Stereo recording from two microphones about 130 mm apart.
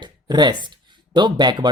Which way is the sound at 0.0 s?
35° right (ahead or behind).